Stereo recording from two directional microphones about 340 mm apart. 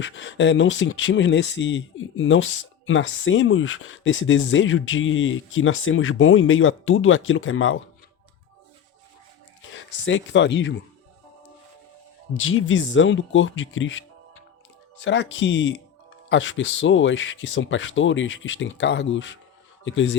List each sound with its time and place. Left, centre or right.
0.0 s speech: left
9.6 s speech: left
12.4 s speech: left
15.0 s speech: left